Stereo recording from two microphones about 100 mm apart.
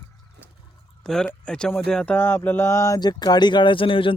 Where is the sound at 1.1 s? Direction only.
10° left (ahead or behind).